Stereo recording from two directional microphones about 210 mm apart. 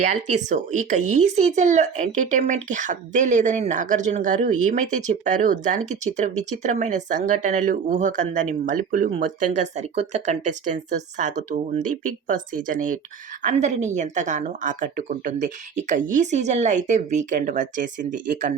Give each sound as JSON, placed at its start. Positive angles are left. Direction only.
{"t": 0.0, "sound": "speech", "side_deg": -35}
{"t": 12.6, "sound": "speech", "side_deg": -40}